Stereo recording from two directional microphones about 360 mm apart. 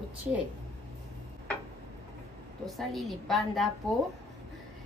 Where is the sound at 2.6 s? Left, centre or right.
Centre.